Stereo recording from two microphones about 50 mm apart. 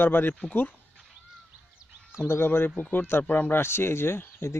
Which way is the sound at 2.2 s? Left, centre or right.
Left.